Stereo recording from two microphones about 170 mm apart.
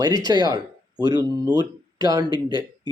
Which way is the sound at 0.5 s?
25° right (ahead or behind).